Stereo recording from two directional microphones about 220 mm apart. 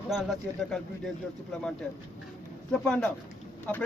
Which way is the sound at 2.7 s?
5° left (ahead or behind).